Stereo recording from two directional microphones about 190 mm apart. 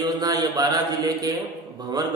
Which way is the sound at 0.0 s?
20° right (ahead or behind).